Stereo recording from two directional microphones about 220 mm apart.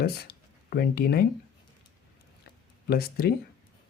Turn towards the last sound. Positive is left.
turn(degrees=45)  # may be behind; listen again after turning